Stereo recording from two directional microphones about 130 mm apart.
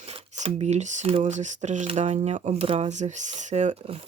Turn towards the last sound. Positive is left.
turn(degrees=-60)  # may be behind; listen again after turning